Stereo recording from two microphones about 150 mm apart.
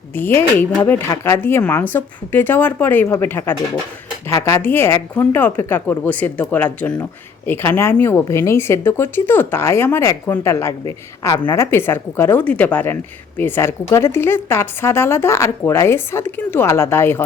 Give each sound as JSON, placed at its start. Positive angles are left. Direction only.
{"t": 0.2, "sound": "a woman's voice", "side_deg": 15}